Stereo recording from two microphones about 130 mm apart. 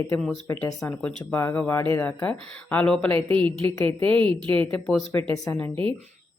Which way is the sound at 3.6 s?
15° left (ahead or behind).